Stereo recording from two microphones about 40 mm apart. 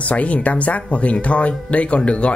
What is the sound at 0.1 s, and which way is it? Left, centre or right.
Speech, left.